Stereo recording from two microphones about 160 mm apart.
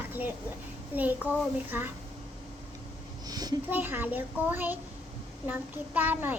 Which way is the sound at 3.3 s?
25° right (ahead or behind).